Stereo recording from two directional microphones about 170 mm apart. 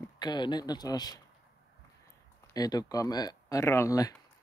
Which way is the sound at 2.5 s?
20° left (ahead or behind).